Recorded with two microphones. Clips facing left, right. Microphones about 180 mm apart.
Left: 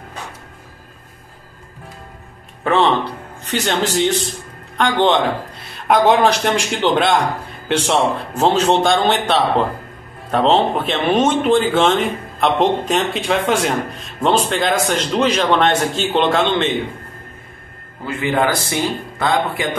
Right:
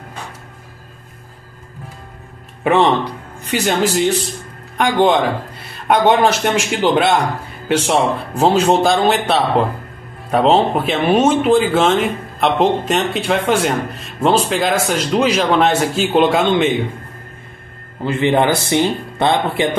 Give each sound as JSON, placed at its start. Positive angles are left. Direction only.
{"t": 2.6, "sound": "a man's voice", "side_deg": -15}
{"t": 18.0, "sound": "speech", "side_deg": -25}